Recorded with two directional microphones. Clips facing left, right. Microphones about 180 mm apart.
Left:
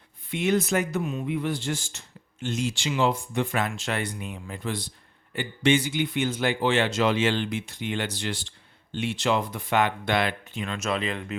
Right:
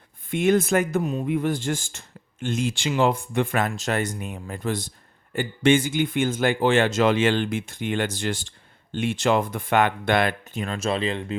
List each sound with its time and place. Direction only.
0.3 s speech: 50° right (ahead or behind)
3.7 s speech: 40° right (ahead or behind)
10.8 s speech: 30° right (ahead or behind)